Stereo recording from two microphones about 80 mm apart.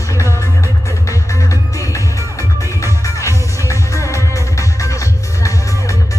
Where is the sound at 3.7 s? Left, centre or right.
Left.